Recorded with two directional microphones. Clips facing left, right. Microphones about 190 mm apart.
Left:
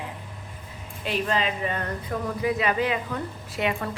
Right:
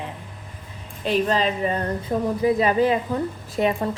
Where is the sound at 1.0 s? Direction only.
35° right (ahead or behind).